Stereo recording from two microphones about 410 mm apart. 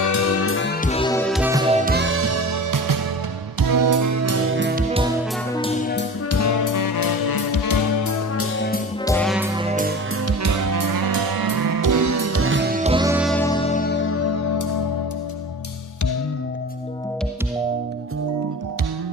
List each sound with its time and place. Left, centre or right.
0.0 s music: left; by 1.8 s centre
1.9 s music: right
5.6 s music: centre
6.3 s music: left
8.5 s music: left
9.0 s music: centre
9.6 s music: centre
10.2 s music: right; by 14.7 s left